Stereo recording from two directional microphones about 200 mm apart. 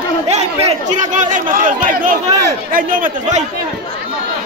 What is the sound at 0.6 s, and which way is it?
A man's voice, 40° right (ahead or behind).